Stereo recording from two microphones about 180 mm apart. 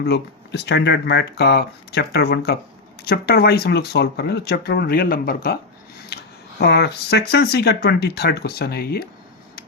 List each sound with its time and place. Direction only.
0.0 s speech: 65° left (ahead or behind)
6.1 s a sound: 65° left (ahead or behind)
6.6 s speech: 65° left (ahead or behind)